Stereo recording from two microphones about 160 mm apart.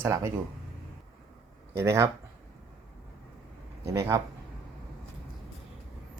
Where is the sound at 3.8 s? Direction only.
20° right (ahead or behind).